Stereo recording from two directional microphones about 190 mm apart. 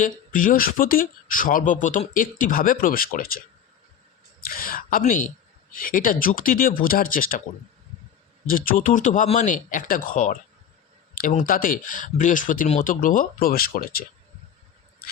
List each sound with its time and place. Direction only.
0.0 s speech: 45° left (ahead or behind)
4.4 s a woman's voice: 50° left (ahead or behind)
8.4 s speech: 45° left (ahead or behind)